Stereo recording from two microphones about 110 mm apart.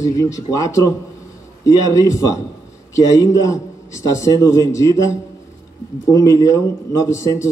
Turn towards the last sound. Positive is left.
turn(degrees=25)  # may be behind; listen again after turning